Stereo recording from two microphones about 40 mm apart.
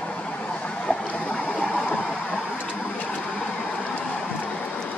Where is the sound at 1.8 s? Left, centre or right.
Left.